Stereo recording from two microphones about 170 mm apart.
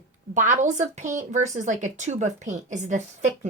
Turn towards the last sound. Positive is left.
turn(degrees=-45)  # may be behind; listen again after turning